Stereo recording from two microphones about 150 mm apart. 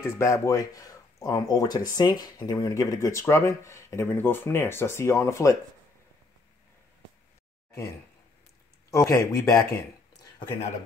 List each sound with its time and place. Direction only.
0.0 s speech: 20° left (ahead or behind)
8.9 s speech: 20° left (ahead or behind)